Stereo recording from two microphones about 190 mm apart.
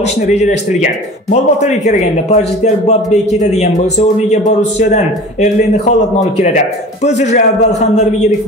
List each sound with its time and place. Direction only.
0.3 s a man's voice: 35° left (ahead or behind)
4.6 s a man's voice: 35° left (ahead or behind)